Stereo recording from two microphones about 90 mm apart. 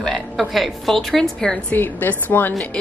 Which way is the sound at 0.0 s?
5° left (ahead or behind).